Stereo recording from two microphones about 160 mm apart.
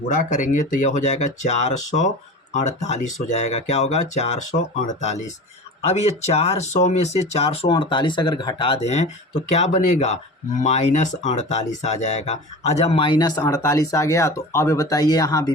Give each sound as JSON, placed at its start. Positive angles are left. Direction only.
{"t": 0.1, "sound": "speech", "side_deg": 50}